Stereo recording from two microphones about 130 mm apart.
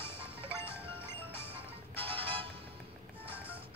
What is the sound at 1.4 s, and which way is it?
Music, 45° right (ahead or behind).